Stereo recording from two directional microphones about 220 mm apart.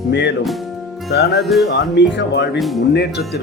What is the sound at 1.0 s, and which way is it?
Speech, 50° left (ahead or behind).